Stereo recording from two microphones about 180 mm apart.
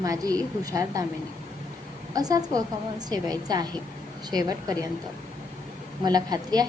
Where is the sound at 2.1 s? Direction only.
20° right (ahead or behind).